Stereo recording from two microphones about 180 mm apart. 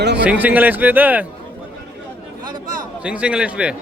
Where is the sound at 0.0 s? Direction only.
70° right (ahead or behind).